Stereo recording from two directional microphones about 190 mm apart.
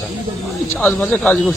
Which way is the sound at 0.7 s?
Centre (ahead or behind).